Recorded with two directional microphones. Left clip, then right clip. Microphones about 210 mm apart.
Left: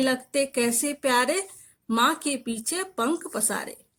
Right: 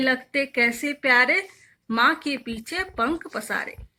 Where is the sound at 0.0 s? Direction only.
55° left (ahead or behind).